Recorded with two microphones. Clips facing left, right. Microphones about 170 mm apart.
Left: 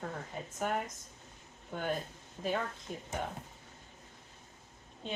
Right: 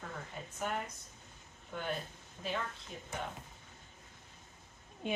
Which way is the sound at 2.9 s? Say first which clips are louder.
Left 5 dB; 45° left (ahead or behind).